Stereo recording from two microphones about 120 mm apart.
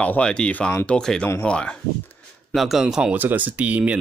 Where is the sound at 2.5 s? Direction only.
Centre (ahead or behind).